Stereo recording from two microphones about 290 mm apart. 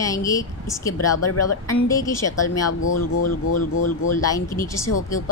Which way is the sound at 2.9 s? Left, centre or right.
Left.